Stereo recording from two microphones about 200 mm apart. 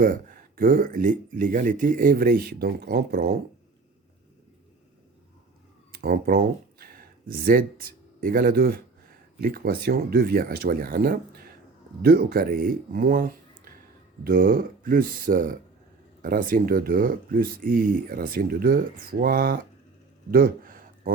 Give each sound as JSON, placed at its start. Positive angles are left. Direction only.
{"t": 0.0, "sound": "speech", "side_deg": -45}
{"t": 5.9, "sound": "speech", "side_deg": -50}
{"t": 20.3, "sound": "a sound", "side_deg": -45}